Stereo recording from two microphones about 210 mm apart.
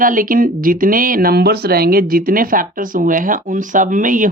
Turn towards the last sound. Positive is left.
turn(degrees=-40)  # may be behind; listen again after turning